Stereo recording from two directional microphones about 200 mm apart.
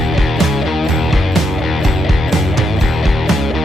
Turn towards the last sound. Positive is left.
turn(degrees=0)  # may be behind; listen again after turning